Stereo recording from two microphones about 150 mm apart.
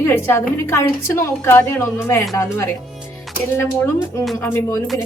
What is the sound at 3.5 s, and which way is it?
A woman's voice, 15° left (ahead or behind).